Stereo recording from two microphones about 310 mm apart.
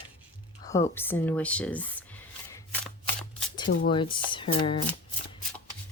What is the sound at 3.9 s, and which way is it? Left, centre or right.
Speech, centre.